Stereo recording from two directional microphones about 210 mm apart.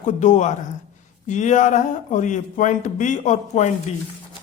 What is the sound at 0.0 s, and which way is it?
Speech, 35° left (ahead or behind).